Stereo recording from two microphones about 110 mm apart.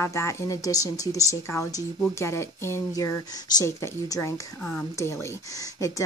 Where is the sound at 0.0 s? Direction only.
25° left (ahead or behind).